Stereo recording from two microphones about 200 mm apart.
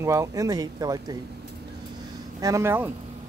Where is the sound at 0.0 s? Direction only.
15° right (ahead or behind).